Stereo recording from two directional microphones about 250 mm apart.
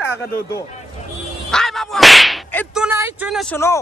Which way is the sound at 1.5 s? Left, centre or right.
Centre.